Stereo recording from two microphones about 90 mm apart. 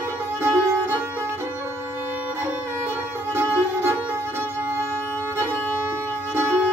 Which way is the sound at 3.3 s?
25° right (ahead or behind).